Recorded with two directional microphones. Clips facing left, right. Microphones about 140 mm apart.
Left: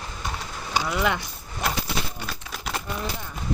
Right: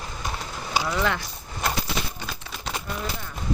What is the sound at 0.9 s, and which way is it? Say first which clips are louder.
Speech: left 2 dB; 15° left (ahead or behind).